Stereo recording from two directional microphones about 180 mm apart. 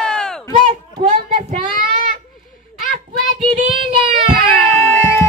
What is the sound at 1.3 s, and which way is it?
Child singing, 50° right (ahead or behind).